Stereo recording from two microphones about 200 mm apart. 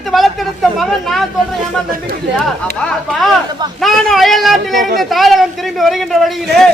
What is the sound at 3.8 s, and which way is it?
Speech, centre (ahead or behind).